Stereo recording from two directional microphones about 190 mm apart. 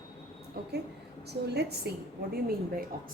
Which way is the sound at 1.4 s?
60° right (ahead or behind).